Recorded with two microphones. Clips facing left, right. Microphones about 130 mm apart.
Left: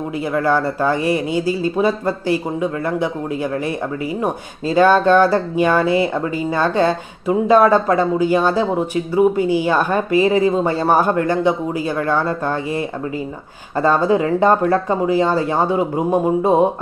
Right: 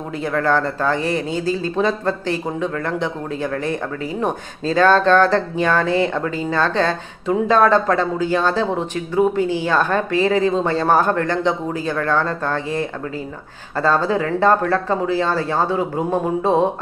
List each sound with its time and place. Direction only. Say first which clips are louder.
0.2 s speech: left 1 dB; 10° left (ahead or behind)